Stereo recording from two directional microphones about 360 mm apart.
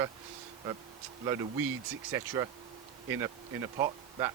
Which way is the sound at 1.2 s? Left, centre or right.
Centre.